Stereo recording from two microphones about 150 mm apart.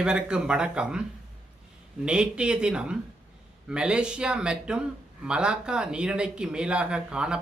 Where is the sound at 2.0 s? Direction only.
5° right (ahead or behind).